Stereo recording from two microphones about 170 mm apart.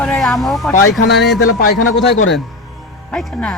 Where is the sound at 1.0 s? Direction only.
80° left.